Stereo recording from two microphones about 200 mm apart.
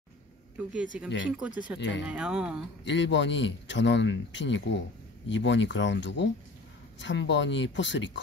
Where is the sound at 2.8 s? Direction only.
65° left (ahead or behind).